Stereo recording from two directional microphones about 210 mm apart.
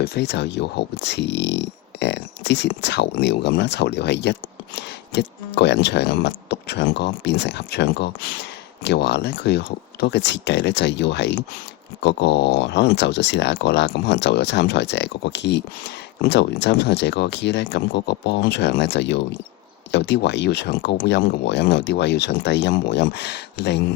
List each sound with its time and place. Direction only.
0.0 s speech: 50° left (ahead or behind)